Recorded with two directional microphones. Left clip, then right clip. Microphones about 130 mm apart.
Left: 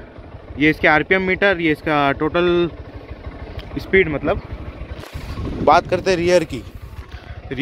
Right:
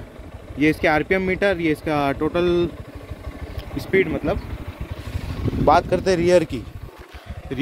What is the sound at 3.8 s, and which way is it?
Speech, 10° right (ahead or behind).